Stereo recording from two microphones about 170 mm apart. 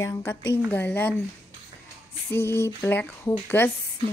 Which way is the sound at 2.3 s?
15° left (ahead or behind).